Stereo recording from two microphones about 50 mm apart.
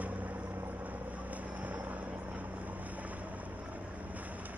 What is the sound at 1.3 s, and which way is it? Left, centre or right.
Vehicle, right.